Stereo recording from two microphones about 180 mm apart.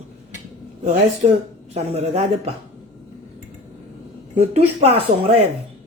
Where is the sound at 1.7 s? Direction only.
35° right (ahead or behind).